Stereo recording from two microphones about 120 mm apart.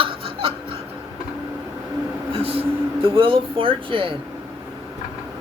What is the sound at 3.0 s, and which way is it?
Speech, 50° right (ahead or behind).